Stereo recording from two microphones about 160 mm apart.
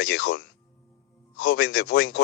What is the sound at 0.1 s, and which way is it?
Speech, 90° left.